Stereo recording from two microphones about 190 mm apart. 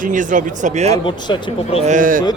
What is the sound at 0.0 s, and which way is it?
Speech, 40° right (ahead or behind).